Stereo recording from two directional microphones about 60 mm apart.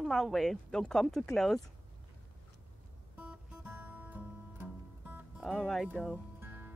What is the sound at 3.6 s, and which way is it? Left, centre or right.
Music, right.